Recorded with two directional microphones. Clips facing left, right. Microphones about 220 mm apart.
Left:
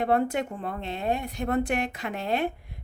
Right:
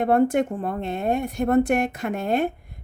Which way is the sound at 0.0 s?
50° right (ahead or behind).